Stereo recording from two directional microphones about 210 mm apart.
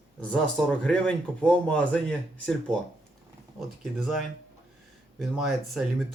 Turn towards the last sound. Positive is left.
turn(degrees=0)  # may be behind; listen again after turning